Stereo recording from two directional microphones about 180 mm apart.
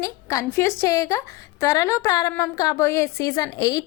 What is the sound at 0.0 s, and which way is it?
A woman's voice, 15° left (ahead or behind).